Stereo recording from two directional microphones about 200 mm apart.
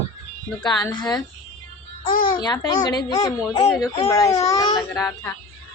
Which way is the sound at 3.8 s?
30° left (ahead or behind).